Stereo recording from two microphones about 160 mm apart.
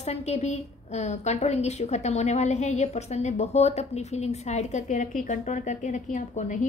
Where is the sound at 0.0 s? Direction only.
45° left (ahead or behind).